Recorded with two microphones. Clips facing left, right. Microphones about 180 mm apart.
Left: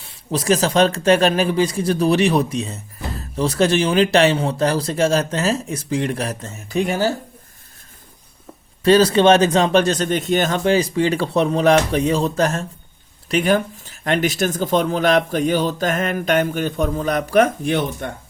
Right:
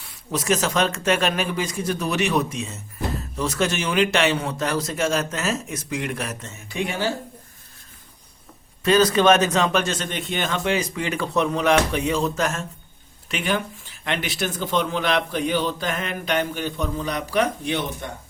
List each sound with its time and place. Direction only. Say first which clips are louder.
0.0 s speech: left 4 dB; 30° left (ahead or behind)
8.8 s speech: left 4 dB; 30° left (ahead or behind); by 18.1 s 50° left (ahead or behind)